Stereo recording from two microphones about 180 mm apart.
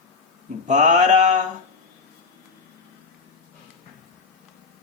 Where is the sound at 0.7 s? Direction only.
40° right (ahead or behind).